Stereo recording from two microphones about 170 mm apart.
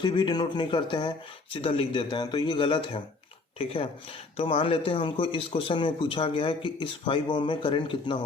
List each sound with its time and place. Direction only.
0.0 s speech: 25° left (ahead or behind)